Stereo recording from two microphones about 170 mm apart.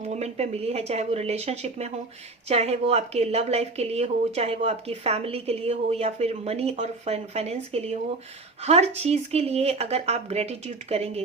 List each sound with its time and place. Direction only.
0.1 s speech: 40° right (ahead or behind)